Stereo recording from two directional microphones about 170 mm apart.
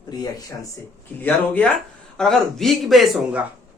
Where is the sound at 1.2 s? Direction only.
10° left (ahead or behind).